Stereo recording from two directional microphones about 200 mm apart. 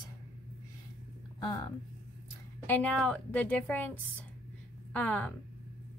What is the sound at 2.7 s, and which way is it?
A woman's voice, 5° left (ahead or behind).